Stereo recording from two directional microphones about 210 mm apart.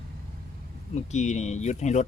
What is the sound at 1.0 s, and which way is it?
Speech, 35° left (ahead or behind).